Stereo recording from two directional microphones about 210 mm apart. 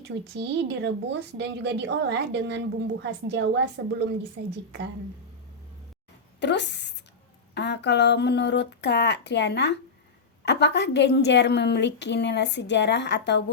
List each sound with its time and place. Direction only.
0.0 s a woman's voice: 55° right (ahead or behind)
6.4 s a woman's voice: 55° left (ahead or behind)